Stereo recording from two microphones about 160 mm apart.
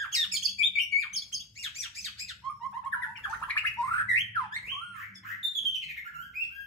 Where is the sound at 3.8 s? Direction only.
20° left (ahead or behind).